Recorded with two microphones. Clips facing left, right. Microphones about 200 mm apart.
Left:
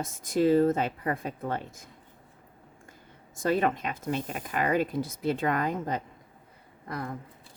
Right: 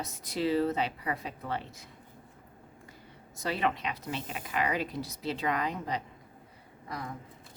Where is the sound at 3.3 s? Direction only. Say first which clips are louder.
Left 5 dB; 50° left (ahead or behind).